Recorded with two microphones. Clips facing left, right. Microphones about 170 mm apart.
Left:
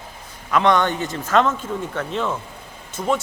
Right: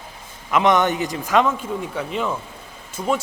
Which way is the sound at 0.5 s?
20° right (ahead or behind).